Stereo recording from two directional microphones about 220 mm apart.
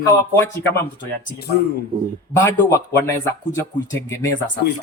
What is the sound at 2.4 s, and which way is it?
A man's voice, 10° left (ahead or behind).